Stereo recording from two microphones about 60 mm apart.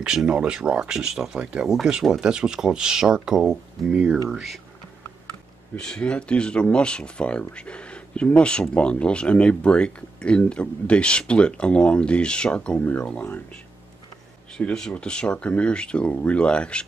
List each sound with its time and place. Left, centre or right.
0.0 s speech: centre
5.8 s speech: centre
14.6 s speech: centre